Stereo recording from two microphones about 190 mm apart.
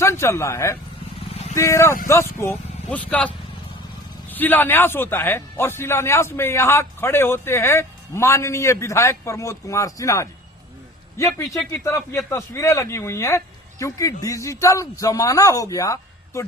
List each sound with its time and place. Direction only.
0.0 s a man's voice: 15° left (ahead or behind)
1.3 s vehicle: 35° left (ahead or behind)
1.5 s a man's voice: 15° left (ahead or behind)
11.8 s a man's voice: 15° left (ahead or behind)